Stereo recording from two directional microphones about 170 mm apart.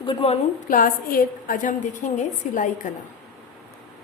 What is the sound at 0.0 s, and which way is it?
Speech, 30° left (ahead or behind).